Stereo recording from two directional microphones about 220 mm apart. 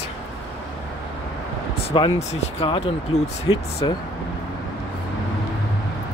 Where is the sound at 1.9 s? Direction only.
25° left (ahead or behind).